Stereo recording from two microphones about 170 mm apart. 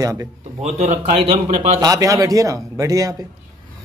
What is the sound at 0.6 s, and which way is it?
Speech, 40° right (ahead or behind).